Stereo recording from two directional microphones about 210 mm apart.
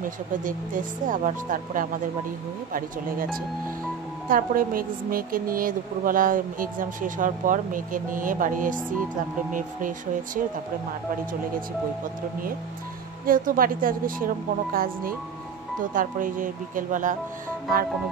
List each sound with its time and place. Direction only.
0.0 s a woman's voice: 40° right (ahead or behind)
13.2 s a woman's voice: 40° right (ahead or behind)